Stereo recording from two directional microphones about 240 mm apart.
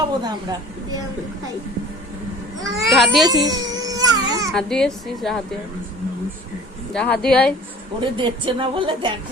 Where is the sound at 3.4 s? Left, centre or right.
Centre.